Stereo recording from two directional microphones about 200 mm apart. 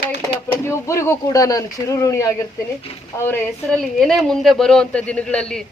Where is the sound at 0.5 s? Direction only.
15° left (ahead or behind).